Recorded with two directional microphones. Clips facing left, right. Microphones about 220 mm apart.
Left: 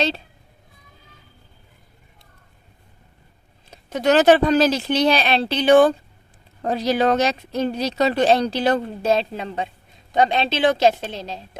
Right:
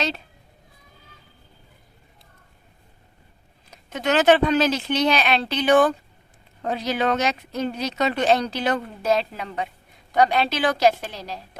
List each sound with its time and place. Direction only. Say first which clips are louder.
3.7 s speech: left 5 dB; 35° left (ahead or behind)